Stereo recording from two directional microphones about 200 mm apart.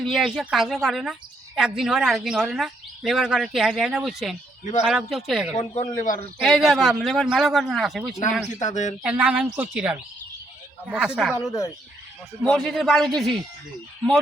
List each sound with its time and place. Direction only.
0.0 s speech: centre (ahead or behind)
5.5 s a man's voice: 35° left (ahead or behind)
6.4 s speech: centre (ahead or behind)
8.6 s a man's voice: 35° left (ahead or behind)
9.0 s a woman's voice: 5° right (ahead or behind)
12.4 s speech: 5° left (ahead or behind)